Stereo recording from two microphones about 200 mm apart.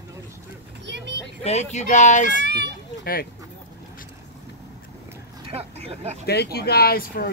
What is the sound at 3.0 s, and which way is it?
Speech, 50° left (ahead or behind).